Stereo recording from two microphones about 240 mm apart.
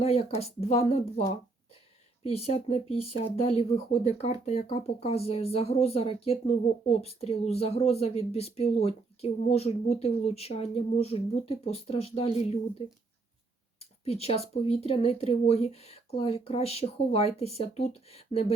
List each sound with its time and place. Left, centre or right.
0.0 s speech: left
2.2 s speech: left
14.0 s speech: left